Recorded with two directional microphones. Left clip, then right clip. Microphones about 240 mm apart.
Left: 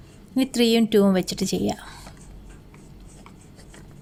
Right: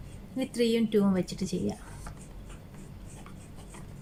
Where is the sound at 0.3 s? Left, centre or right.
Left.